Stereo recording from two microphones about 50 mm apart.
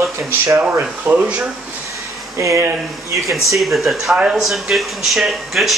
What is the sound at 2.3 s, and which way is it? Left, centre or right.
Speech, right.